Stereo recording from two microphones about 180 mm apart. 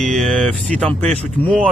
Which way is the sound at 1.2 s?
5° left (ahead or behind).